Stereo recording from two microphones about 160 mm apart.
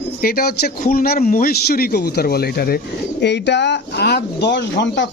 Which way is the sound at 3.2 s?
90° left.